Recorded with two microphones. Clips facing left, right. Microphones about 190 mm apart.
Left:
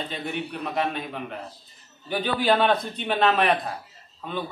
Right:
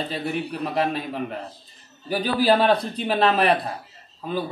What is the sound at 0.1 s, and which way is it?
A man's voice, 35° right (ahead or behind).